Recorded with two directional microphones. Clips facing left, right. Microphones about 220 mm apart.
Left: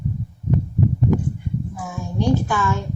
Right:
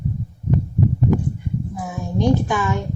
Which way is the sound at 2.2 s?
15° right (ahead or behind).